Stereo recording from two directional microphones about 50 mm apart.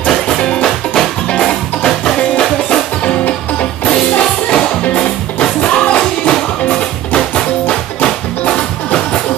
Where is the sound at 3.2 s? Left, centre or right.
Left.